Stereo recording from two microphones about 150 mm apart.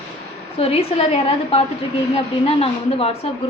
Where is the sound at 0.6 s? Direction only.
40° left (ahead or behind).